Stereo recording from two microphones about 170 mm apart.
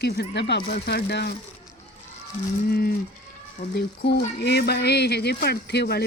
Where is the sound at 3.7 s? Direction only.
80° left.